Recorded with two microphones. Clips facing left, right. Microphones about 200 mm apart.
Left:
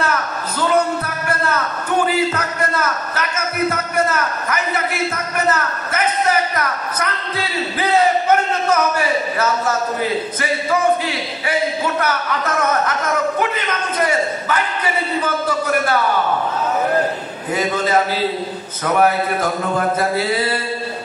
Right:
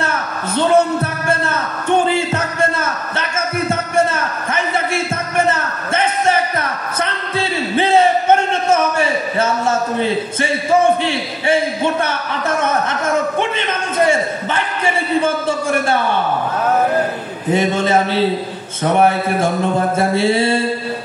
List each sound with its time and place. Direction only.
0.6 s music: 25° right (ahead or behind)
1.3 s a sound: 25° right (ahead or behind)
15.2 s a man's voice: 25° right (ahead or behind)
17.5 s a man's voice: 25° right (ahead or behind)